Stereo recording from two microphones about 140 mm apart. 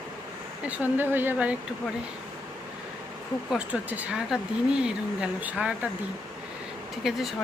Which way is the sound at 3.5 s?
10° right (ahead or behind).